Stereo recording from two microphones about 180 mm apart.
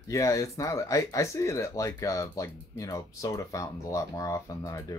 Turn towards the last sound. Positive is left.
turn(degrees=20)  # may be behind; listen again after turning